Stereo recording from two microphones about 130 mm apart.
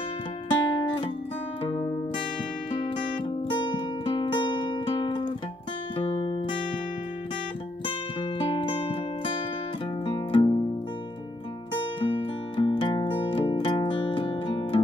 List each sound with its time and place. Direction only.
0.5 s music: 45° left (ahead or behind)
3.3 s music: 35° left (ahead or behind)
7.8 s music: 40° left (ahead or behind)
12.0 s music: 40° left (ahead or behind)